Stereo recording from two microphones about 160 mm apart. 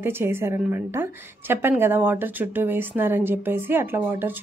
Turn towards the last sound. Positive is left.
turn(degrees=-10)  # may be behind; listen again after turning